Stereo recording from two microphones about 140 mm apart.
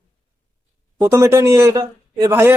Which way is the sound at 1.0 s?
20° right (ahead or behind).